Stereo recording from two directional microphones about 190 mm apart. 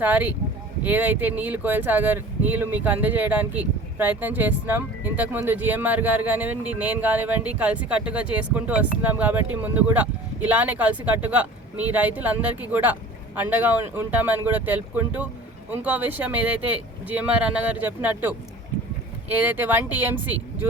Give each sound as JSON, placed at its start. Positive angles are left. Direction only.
{"t": 0.0, "sound": "speech", "side_deg": -10}